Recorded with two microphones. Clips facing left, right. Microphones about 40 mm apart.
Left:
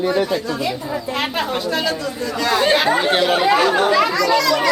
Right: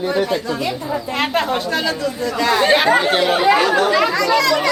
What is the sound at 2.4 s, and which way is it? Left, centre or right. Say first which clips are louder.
Speech: right 2 dB; centre.